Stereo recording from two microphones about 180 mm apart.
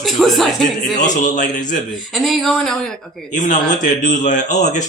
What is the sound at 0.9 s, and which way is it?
Speech, 45° left (ahead or behind).